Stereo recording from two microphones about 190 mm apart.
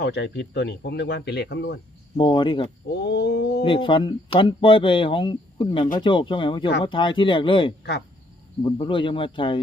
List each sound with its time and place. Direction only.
0.0 s speech: 60° left (ahead or behind)
2.1 s speech: 25° left (ahead or behind)
2.9 s speech: 60° left (ahead or behind)
3.6 s speech: 25° left (ahead or behind)